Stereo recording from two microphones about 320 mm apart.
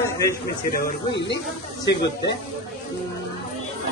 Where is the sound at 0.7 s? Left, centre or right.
Left.